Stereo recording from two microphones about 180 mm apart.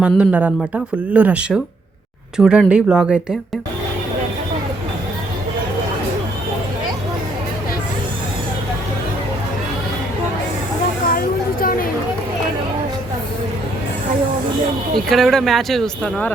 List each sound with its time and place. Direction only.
0.0 s speech: 5° right (ahead or behind)
11.1 s a sound: 55° left (ahead or behind)
15.1 s speech: centre (ahead or behind)